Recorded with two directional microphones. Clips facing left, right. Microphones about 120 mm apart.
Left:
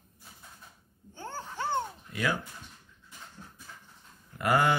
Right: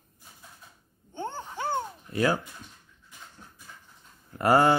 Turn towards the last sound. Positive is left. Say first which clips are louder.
# right 5 dB
turn(degrees=-35)  # may be behind; listen again after turning